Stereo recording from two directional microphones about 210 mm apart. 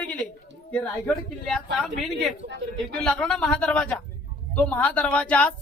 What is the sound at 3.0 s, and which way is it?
A woman's voice, 5° left (ahead or behind).